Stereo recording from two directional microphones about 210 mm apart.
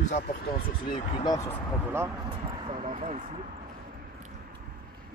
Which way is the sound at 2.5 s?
25° right (ahead or behind).